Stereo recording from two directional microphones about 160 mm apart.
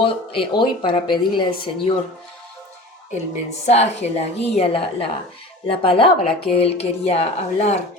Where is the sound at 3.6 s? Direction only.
45° left (ahead or behind).